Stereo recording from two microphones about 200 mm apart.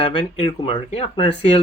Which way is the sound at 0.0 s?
25° left (ahead or behind).